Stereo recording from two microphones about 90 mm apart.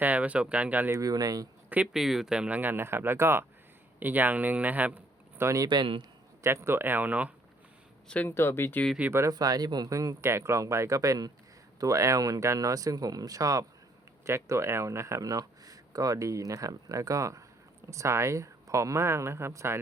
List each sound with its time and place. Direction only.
0.0 s speech: 15° right (ahead or behind)
0.9 s speech: 35° right (ahead or behind)
1.9 s speech: 5° right (ahead or behind)
2.6 s speech: 25° right (ahead or behind)
5.6 s speech: 60° right (ahead or behind)
6.4 s speech: 30° right (ahead or behind)
8.0 s speech: 15° left (ahead or behind)
8.3 s speech: 25° left (ahead or behind)
9.0 s speech: 30° right (ahead or behind)
9.3 s speech: 45° right (ahead or behind); by 19.8 s 30° right (ahead or behind)